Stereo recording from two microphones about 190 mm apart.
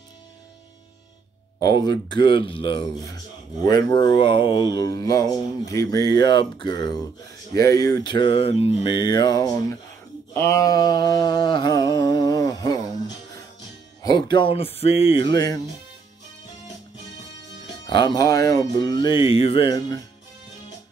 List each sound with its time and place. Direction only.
1.8 s speech: 25° left (ahead or behind)
10.3 s a sound: 15° left (ahead or behind)
14.0 s speech: 25° left (ahead or behind)
17.8 s speech: 25° left (ahead or behind)